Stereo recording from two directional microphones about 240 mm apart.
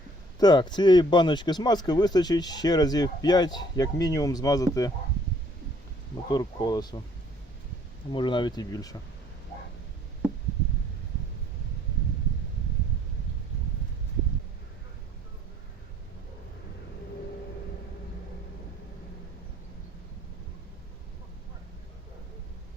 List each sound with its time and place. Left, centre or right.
0.3 s speech: centre
6.2 s speech: centre
8.1 s speech: centre